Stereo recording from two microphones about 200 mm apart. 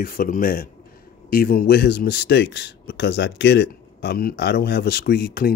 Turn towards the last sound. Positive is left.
turn(degrees=50)  # may be behind; listen again after turning